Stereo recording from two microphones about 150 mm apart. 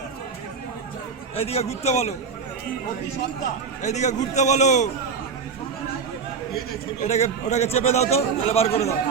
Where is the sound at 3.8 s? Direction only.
50° left (ahead or behind).